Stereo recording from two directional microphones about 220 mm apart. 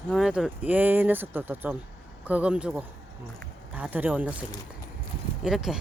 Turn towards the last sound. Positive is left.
turn(degrees=0)  # may be behind; listen again after turning